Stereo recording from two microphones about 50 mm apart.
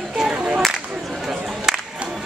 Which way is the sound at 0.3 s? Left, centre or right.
Right.